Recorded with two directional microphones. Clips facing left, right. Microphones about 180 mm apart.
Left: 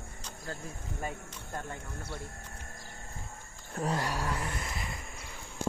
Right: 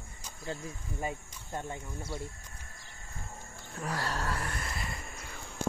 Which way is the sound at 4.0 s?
15° left (ahead or behind).